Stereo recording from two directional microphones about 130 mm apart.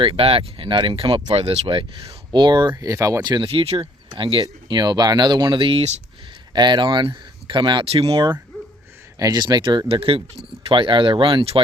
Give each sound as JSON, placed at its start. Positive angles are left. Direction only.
{"t": 0.0, "sound": "speech", "side_deg": -45}
{"t": 3.5, "sound": "speech", "side_deg": -50}
{"t": 6.5, "sound": "speech", "side_deg": -35}
{"t": 8.0, "sound": "speech", "side_deg": -30}